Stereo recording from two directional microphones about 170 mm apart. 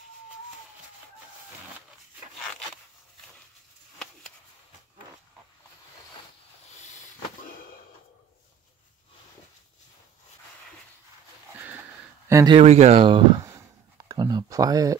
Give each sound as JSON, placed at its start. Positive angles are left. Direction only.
{"t": 12.3, "sound": "speech", "side_deg": -20}
{"t": 12.5, "sound": "speech", "side_deg": -40}
{"t": 13.4, "sound": "a sound", "side_deg": -20}